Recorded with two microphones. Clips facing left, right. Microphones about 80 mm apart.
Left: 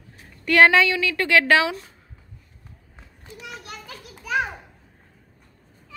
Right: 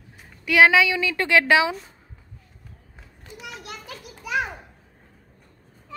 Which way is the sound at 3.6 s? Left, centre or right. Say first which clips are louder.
Right 1 dB; centre.